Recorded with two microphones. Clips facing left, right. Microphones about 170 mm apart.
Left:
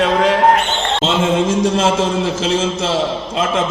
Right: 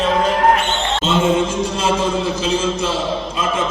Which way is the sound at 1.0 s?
90° left.